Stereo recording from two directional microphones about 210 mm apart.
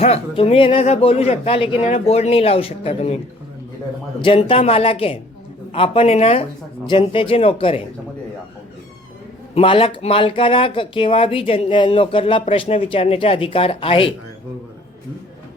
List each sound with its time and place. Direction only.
0.0 s speech: 30° left (ahead or behind)
4.2 s speech: 25° left (ahead or behind)
9.6 s speech: 25° left (ahead or behind)